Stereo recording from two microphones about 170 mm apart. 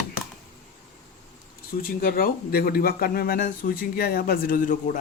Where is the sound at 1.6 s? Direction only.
60° left (ahead or behind).